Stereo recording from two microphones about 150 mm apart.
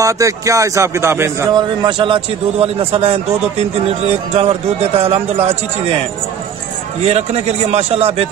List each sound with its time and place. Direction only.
0.0 s a man's voice: 20° right (ahead or behind); by 5.9 s 40° right (ahead or behind)
7.1 s a man's voice: 45° right (ahead or behind)